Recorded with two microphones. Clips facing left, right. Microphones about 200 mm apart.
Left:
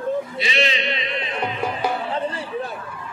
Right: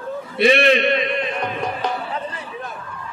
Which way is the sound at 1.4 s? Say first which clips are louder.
Even; 10° left (ahead or behind).